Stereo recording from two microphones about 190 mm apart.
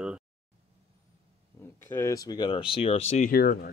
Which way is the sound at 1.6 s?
15° left (ahead or behind).